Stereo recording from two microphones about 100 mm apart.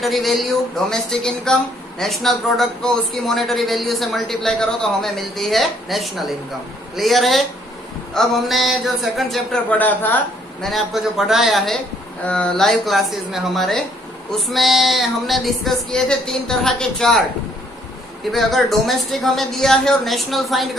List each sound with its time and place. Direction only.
0.0 s speech: centre (ahead or behind)
9.7 s a woman's voice: 20° left (ahead or behind)
10.6 s speech: centre (ahead or behind)
18.3 s speech: centre (ahead or behind)